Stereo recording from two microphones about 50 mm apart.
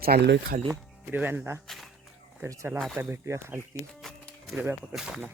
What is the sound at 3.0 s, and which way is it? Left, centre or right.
Speech, right.